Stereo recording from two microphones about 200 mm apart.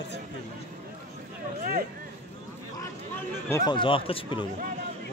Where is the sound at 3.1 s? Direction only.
15° left (ahead or behind).